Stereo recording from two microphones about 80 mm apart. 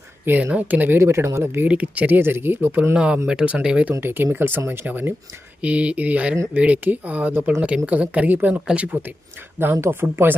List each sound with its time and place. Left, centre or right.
0.3 s speech: right
1.6 s speech: centre
2.9 s speech: centre
4.0 s speech: right
9.7 s speech: right